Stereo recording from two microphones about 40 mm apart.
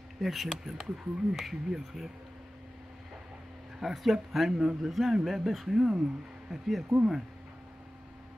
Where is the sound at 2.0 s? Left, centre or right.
Centre.